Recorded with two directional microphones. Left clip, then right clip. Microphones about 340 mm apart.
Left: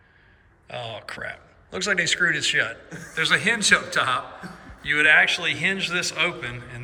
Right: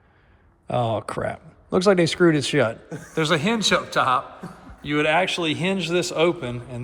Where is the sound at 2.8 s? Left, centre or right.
Right.